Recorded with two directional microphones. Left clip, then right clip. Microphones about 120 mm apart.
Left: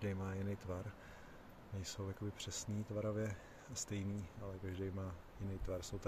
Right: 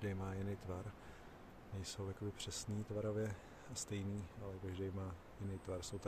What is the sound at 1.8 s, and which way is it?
Speech, 20° left (ahead or behind).